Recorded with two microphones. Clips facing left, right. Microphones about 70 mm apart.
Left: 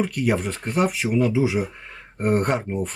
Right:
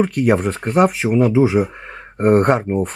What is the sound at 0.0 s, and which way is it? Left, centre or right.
Speech, right.